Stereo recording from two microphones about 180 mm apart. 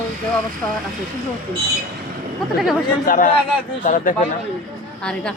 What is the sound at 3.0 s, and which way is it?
Speech, 50° left (ahead or behind).